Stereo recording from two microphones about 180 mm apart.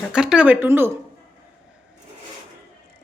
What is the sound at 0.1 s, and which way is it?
Speech, 5° right (ahead or behind).